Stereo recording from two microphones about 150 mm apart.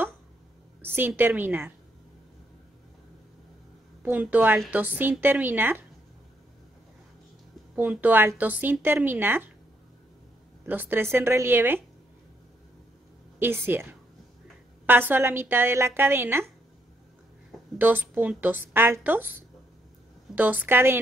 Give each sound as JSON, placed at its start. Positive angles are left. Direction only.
{"t": 0.8, "sound": "a woman's voice", "side_deg": -15}
{"t": 4.0, "sound": "a woman's voice", "side_deg": -10}
{"t": 7.7, "sound": "a woman's voice", "side_deg": -10}
{"t": 10.6, "sound": "a woman's voice", "side_deg": -10}
{"t": 13.4, "sound": "a woman's voice", "side_deg": -15}
{"t": 17.7, "sound": "a woman's voice", "side_deg": -10}